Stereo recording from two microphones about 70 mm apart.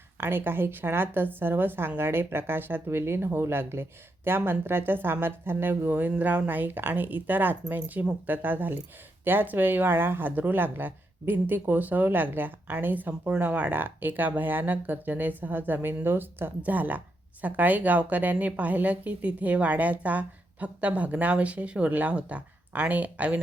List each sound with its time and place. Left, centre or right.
0.2 s speech: right